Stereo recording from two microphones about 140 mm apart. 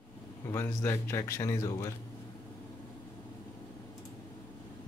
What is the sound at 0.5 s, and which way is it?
Speech, 15° left (ahead or behind).